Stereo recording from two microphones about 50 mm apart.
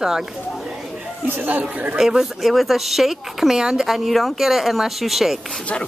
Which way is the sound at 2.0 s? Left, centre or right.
Centre.